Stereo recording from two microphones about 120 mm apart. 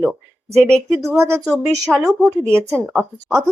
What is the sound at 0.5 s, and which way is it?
Speech, 5° left (ahead or behind).